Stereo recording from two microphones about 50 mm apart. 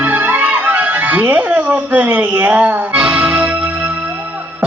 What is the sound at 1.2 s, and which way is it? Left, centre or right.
Speech, right.